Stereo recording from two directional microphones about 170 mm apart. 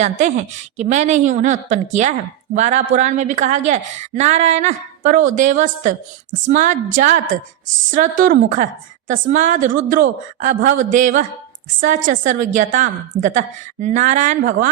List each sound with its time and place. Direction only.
0.0 s a woman's voice: 45° right (ahead or behind)